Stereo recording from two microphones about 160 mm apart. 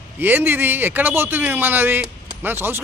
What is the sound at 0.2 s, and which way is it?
Speech, 10° right (ahead or behind).